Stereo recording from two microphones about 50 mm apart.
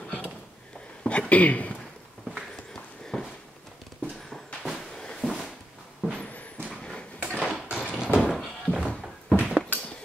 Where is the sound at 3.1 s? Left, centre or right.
Centre.